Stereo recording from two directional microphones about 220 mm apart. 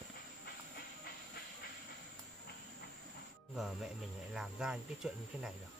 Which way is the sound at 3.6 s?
Centre (ahead or behind).